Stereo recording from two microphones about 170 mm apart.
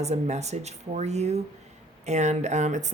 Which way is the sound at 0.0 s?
40° right (ahead or behind).